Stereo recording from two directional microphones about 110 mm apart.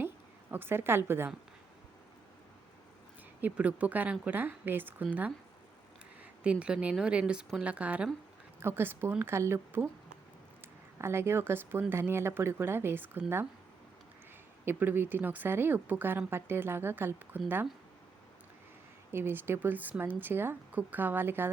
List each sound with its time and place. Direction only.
0.5 s a woman's voice: 20° right (ahead or behind)
3.4 s speech: 15° right (ahead or behind)
6.4 s a woman's voice: 10° right (ahead or behind)
10.9 s a woman's voice: 25° right (ahead or behind)
14.6 s a woman's voice: 20° right (ahead or behind)
19.1 s speech: 20° right (ahead or behind)